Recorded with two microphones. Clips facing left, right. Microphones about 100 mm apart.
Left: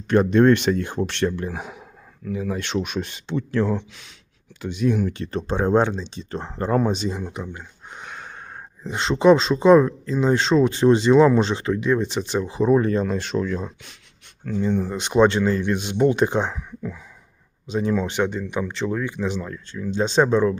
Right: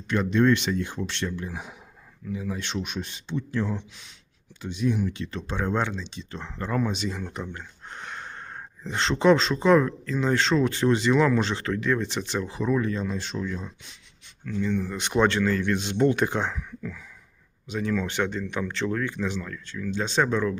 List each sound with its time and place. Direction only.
0.1 s speech: 50° left (ahead or behind)
7.1 s speech: 15° left (ahead or behind)
12.7 s speech: 50° left (ahead or behind); by 13.9 s 65° left (ahead or behind)
14.6 s speech: 35° left (ahead or behind)
14.9 s speech: 20° left (ahead or behind)